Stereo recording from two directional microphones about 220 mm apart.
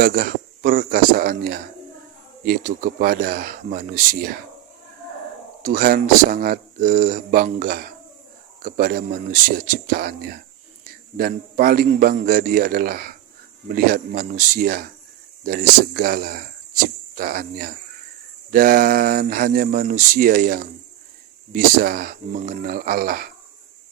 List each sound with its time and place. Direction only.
0.0 s speech: 40° right (ahead or behind)
5.6 s speech: 40° right (ahead or behind)